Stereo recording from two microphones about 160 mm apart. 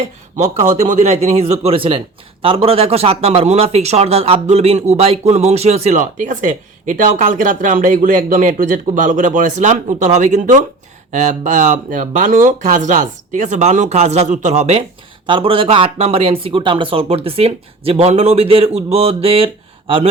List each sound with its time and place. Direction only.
0.8 s speech: 45° right (ahead or behind)